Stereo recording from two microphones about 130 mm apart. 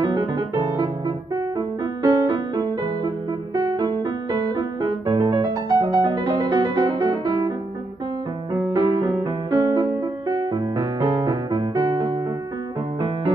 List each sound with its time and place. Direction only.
0.0 s music: 30° right (ahead or behind)
8.8 s music: 30° right (ahead or behind)